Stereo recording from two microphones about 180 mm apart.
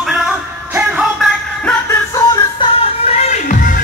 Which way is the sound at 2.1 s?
25° left (ahead or behind).